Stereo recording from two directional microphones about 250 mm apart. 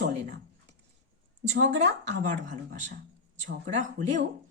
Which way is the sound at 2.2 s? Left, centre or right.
Right.